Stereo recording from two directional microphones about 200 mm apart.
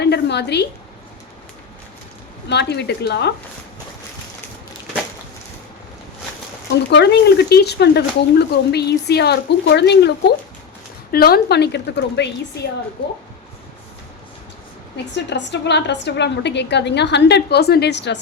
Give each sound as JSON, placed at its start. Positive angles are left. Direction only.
{"t": 0.0, "sound": "a sound", "side_deg": 55}
{"t": 2.5, "sound": "speech", "side_deg": 55}
{"t": 6.9, "sound": "speech", "side_deg": 55}
{"t": 15.1, "sound": "speech", "side_deg": 60}